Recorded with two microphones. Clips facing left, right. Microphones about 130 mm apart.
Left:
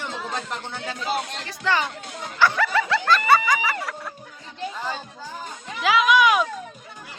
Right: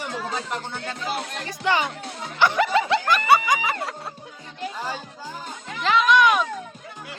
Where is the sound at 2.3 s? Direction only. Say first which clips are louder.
Right 1 dB; 20° right (ahead or behind).